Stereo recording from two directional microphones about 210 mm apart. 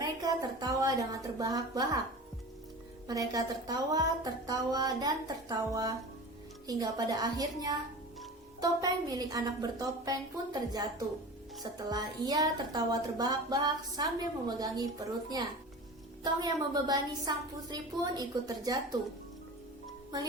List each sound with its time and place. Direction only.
0.2 s a woman's voice: 20° right (ahead or behind)
3.1 s a woman's voice: 15° right (ahead or behind)